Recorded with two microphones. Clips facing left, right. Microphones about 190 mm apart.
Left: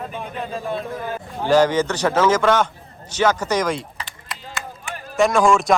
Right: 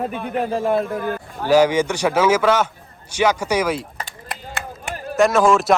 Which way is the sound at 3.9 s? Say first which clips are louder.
Right 3 dB; 50° right (ahead or behind).